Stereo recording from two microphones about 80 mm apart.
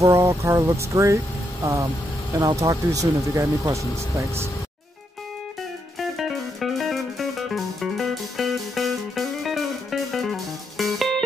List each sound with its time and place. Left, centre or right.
0.0 s speech: right
5.9 s music: centre